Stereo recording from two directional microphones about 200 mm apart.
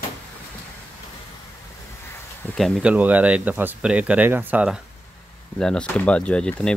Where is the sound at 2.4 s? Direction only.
Centre (ahead or behind).